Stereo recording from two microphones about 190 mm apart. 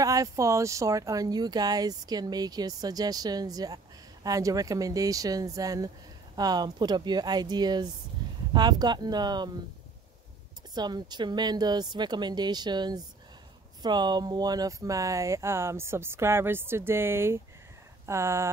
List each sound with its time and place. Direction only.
0.0 s speech: 20° right (ahead or behind)
10.7 s speech: 20° right (ahead or behind)